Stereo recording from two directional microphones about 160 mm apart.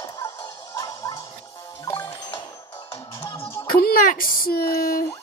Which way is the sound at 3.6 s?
65° left (ahead or behind).